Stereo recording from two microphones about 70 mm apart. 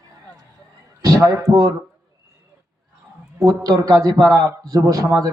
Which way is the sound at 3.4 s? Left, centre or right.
Right.